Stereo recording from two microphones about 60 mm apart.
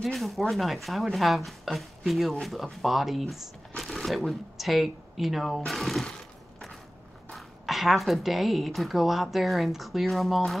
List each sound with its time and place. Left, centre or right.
0.0 s speech: centre
7.2 s speech: centre